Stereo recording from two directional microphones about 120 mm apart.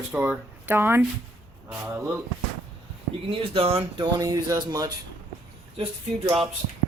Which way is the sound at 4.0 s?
30° right (ahead or behind).